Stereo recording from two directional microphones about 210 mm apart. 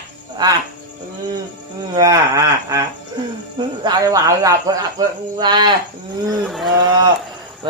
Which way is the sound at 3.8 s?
15° right (ahead or behind).